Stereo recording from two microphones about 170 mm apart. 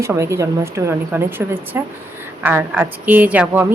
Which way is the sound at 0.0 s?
15° right (ahead or behind).